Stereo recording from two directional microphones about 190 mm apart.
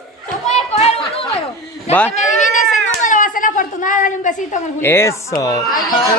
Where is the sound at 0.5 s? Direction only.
35° left (ahead or behind).